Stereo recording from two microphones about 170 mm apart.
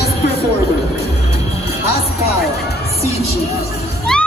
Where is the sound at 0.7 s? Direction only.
40° left (ahead or behind).